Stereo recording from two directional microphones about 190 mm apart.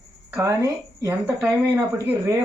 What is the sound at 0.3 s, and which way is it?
Speech, 15° right (ahead or behind).